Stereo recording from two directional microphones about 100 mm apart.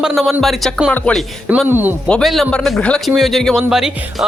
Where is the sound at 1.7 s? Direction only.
20° right (ahead or behind).